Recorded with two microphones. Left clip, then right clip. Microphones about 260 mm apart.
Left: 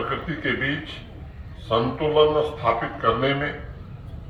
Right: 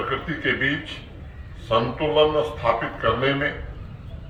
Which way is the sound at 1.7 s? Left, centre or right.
Right.